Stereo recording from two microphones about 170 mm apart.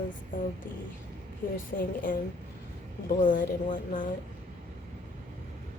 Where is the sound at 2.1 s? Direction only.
55° left (ahead or behind).